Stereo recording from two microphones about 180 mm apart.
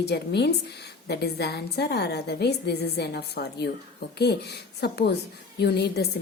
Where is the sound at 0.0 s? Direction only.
65° left (ahead or behind).